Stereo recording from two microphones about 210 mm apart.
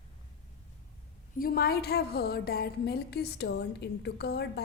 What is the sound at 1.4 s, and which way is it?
A woman's voice, 45° left (ahead or behind).